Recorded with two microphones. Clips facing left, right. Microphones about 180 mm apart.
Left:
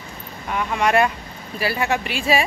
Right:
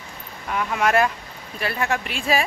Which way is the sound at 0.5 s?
Centre (ahead or behind).